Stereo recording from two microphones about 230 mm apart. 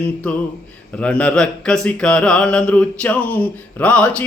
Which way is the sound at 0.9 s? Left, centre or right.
Centre.